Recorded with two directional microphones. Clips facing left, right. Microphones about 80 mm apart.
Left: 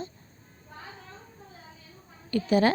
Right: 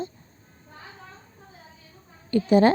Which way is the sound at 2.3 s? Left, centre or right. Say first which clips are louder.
Right 5 dB; right.